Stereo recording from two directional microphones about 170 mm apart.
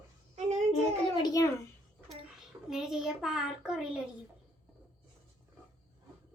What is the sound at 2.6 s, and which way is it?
A child's voice, centre (ahead or behind).